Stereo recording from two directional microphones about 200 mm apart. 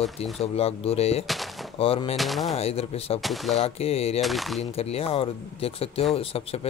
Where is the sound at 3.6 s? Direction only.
30° left (ahead or behind).